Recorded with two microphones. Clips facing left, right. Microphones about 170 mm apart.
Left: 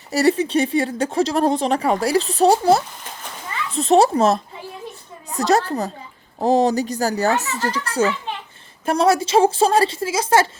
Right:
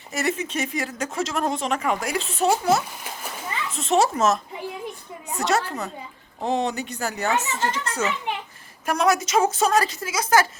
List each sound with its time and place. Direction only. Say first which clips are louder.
0.1 s speech: left 9 dB; 35° left (ahead or behind)
3.0 s a sound: right 1 dB; 10° right (ahead or behind)
3.7 s speech: left 6 dB; 35° left (ahead or behind)